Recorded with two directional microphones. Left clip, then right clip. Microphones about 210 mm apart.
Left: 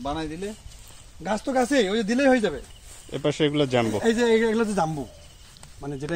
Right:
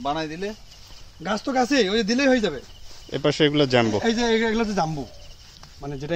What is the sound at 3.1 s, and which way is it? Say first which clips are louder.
A man's voice: right 3 dB; 20° right (ahead or behind).